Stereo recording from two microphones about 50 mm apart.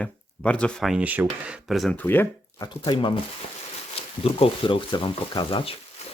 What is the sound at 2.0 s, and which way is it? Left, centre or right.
Speech, left.